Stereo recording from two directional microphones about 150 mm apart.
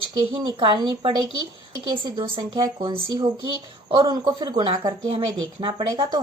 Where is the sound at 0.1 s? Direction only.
35° right (ahead or behind).